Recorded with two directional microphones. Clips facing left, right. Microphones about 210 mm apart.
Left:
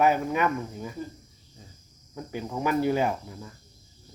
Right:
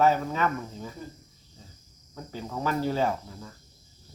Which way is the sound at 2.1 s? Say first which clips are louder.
Left 3 dB; 15° left (ahead or behind).